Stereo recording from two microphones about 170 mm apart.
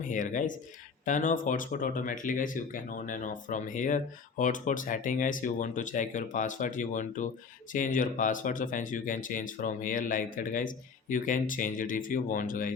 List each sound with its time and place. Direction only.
0.1 s speech: 50° left (ahead or behind)